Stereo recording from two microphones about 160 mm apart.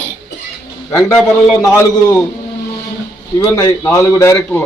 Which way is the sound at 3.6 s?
20° left (ahead or behind).